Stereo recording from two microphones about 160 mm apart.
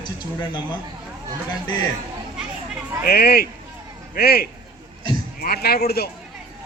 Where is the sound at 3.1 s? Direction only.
75° left (ahead or behind).